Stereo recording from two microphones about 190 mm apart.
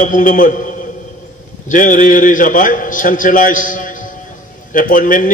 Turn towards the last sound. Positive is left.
turn(degrees=45)  # may be behind; listen again after turning